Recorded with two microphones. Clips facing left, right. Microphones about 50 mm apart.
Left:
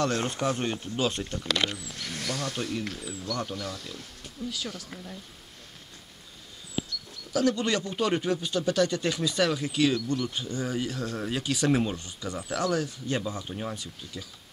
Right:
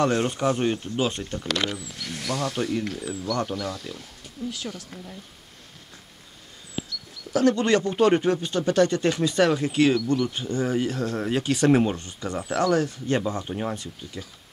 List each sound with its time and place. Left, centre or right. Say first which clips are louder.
0.0 s speech: right 5 dB; right
1.8 s speech: right 2 dB; centre
3.1 s speech: right 7 dB; right
3.4 s speech: right 5 dB; centre
7.3 s speech: right 5 dB; right
13.5 s speech: right 6 dB; right